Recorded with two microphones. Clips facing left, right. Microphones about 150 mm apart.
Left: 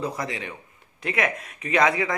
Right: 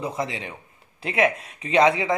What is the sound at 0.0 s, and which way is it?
Speech, 25° right (ahead or behind).